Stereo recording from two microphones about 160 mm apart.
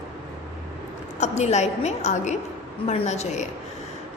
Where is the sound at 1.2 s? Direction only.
45° left (ahead or behind).